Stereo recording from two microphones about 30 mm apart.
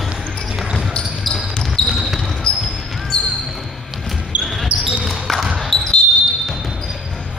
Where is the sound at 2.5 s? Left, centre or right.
Left.